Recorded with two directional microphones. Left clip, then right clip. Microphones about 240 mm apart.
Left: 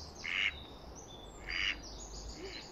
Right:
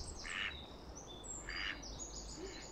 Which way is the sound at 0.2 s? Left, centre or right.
Left.